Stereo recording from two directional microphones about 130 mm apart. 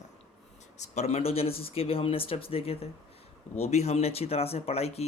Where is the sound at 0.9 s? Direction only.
55° left (ahead or behind).